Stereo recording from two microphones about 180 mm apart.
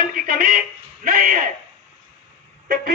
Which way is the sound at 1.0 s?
50° right (ahead or behind).